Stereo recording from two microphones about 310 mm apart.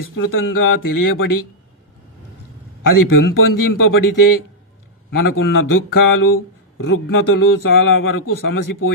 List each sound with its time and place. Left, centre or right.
0.2 s a man's voice: left
2.8 s a man's voice: left